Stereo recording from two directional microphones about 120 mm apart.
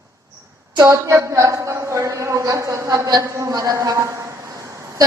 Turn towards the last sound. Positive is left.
turn(degrees=-25)  # may be behind; listen again after turning